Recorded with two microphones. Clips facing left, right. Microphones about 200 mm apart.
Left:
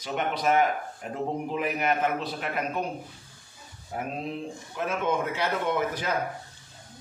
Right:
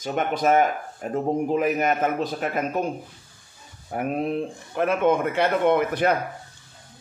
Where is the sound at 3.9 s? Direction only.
60° right (ahead or behind).